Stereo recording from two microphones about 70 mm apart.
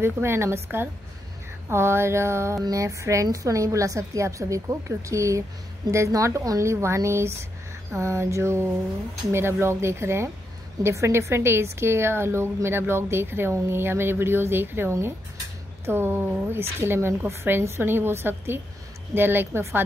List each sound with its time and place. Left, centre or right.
0.0 s a woman's voice: right